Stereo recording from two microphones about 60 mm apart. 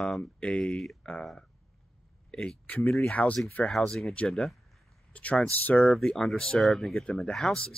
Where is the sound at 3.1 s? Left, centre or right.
Left.